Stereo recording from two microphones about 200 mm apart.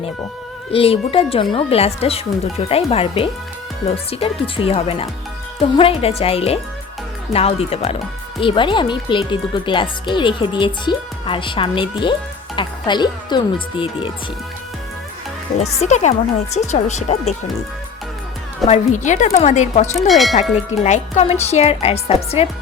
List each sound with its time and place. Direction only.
0.7 s speech: 30° left (ahead or behind)
15.5 s speech: 35° left (ahead or behind)
18.7 s speech: 35° left (ahead or behind)
20.1 s a sound: centre (ahead or behind)
20.8 s speech: 35° left (ahead or behind)